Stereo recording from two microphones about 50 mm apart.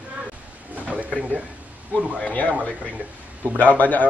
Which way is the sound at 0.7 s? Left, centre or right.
Right.